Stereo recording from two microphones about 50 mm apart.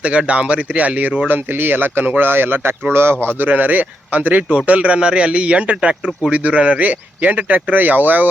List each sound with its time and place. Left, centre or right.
0.0 s speech: right
1.3 s speech: right
3.4 s speech: right